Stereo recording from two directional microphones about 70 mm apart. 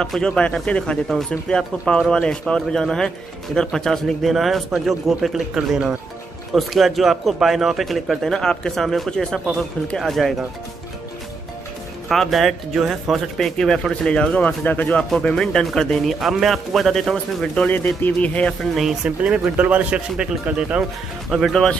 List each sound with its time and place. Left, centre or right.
0.0 s speech: centre
0.4 s speech: centre
12.1 s speech: centre
13.6 s speech: centre
15.0 s speech: centre
17.6 s speech: left
19.0 s a man's voice: centre
21.3 s speech: centre